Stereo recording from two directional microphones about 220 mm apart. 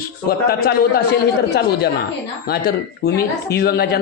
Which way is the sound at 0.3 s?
45° left (ahead or behind).